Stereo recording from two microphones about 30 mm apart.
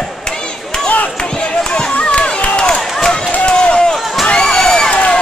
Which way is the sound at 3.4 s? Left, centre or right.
Left.